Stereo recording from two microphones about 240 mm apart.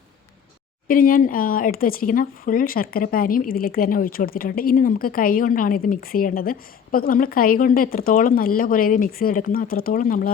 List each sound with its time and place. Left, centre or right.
0.9 s speech: left